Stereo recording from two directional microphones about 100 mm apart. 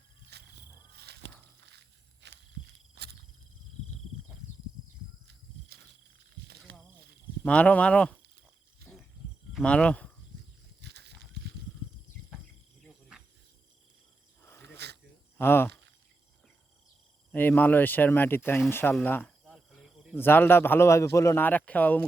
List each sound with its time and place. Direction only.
7.4 s speech: 10° left (ahead or behind)
9.5 s speech: 5° left (ahead or behind)
14.4 s cricket: 25° left (ahead or behind)
15.4 s speech: 20° left (ahead or behind)
17.3 s speech: 20° left (ahead or behind)
19.5 s cricket: 5° right (ahead or behind)
20.1 s speech: 20° left (ahead or behind)
21.4 s speech: 15° left (ahead or behind)